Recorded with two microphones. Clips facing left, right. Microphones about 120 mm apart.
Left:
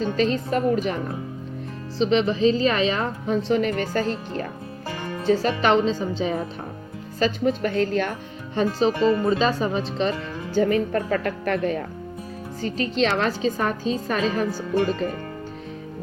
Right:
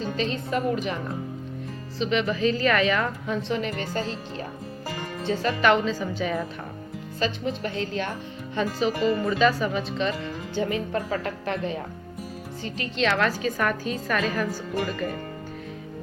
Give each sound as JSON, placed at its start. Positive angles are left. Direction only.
{"t": 0.2, "sound": "speech", "side_deg": 40}
{"t": 2.0, "sound": "a woman's voice", "side_deg": 30}
{"t": 3.9, "sound": "speech", "side_deg": 55}
{"t": 5.2, "sound": "a woman's voice", "side_deg": 35}
{"t": 7.2, "sound": "speech", "side_deg": 45}
{"t": 8.5, "sound": "speech", "side_deg": 35}
{"t": 12.6, "sound": "a woman's voice", "side_deg": 35}